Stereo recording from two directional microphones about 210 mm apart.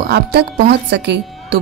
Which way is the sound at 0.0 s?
50° right (ahead or behind).